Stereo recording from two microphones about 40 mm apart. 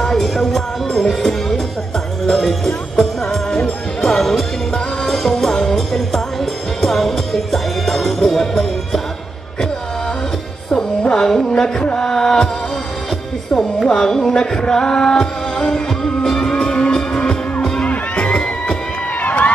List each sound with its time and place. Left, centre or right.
0.2 s music: centre
5.8 s music: centre
10.7 s music: left
13.5 s music: centre
13.8 s carnatic music: centre
14.6 s music: centre
17.8 s music: left
19.2 s run: left